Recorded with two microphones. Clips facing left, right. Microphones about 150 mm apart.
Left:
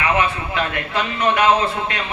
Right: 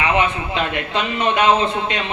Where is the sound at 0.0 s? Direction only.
20° right (ahead or behind).